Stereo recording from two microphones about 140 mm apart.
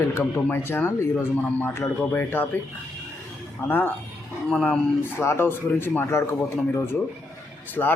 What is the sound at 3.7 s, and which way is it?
Speech, 15° left (ahead or behind).